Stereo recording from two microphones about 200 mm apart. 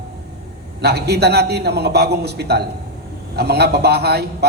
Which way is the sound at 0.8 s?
55° right (ahead or behind).